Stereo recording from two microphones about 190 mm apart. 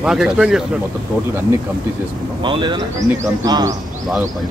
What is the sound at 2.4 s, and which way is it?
A man's voice, 25° right (ahead or behind).